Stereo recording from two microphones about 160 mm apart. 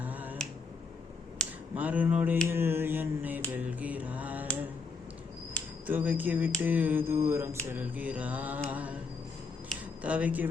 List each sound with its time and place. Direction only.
0.0 s finger snapping: 10° right (ahead or behind)
1.7 s mantra: 10° right (ahead or behind)
3.5 s a sound: 10° right (ahead or behind)
5.8 s mantra: 10° right (ahead or behind)
10.0 s mantra: 10° right (ahead or behind)